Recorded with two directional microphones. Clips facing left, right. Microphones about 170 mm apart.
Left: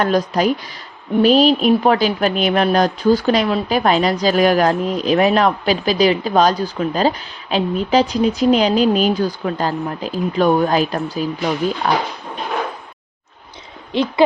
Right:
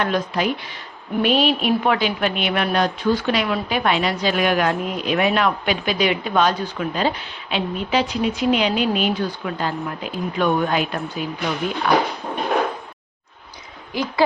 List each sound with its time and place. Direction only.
0.0 s a woman's voice: 40° left (ahead or behind)
13.9 s speech: 25° left (ahead or behind)